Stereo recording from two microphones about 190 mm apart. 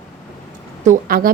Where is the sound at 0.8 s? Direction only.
45° right (ahead or behind).